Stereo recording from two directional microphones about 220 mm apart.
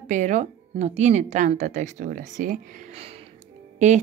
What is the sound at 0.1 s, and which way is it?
Speech, 35° right (ahead or behind).